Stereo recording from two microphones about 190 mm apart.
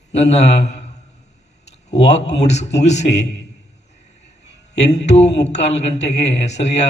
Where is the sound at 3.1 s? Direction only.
65° left (ahead or behind).